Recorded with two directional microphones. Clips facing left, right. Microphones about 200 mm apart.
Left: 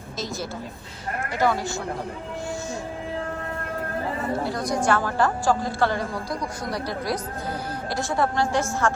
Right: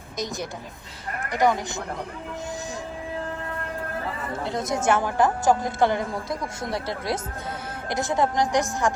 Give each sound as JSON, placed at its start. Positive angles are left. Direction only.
{"t": 1.3, "sound": "speech", "side_deg": -15}
{"t": 4.4, "sound": "a woman's voice", "side_deg": -20}